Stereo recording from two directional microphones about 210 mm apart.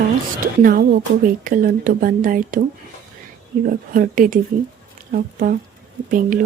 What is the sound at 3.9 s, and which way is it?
Speech, 40° right (ahead or behind).